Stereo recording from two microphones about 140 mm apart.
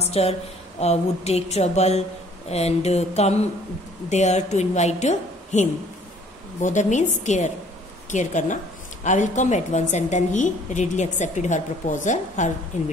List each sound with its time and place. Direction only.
0.0 s a woman's voice: 45° left (ahead or behind)